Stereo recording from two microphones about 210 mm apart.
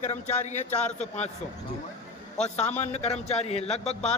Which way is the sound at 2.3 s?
30° left (ahead or behind).